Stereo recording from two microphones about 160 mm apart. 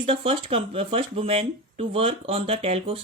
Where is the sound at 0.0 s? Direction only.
35° right (ahead or behind).